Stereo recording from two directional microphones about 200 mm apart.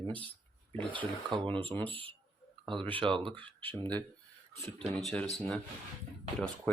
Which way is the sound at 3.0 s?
25° right (ahead or behind).